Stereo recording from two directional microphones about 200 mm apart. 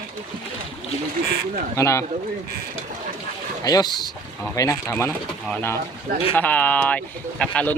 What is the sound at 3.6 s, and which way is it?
Speech, 20° left (ahead or behind).